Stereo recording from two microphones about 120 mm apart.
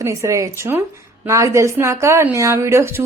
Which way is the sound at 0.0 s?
25° right (ahead or behind).